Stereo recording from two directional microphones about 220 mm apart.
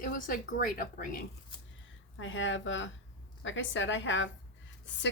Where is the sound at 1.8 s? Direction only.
60° left (ahead or behind).